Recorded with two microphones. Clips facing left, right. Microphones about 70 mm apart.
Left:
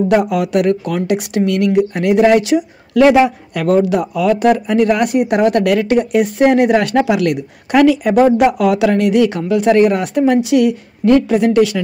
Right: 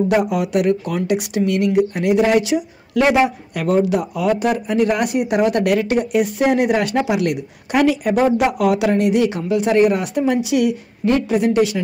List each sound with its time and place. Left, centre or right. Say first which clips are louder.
0.3 s speech: left 3 dB; left
8.0 s speech: left 5 dB; left